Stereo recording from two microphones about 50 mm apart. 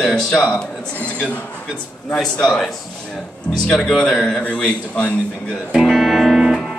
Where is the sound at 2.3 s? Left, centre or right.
Centre.